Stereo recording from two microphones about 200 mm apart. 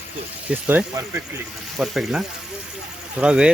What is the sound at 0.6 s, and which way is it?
Speech, 10° right (ahead or behind).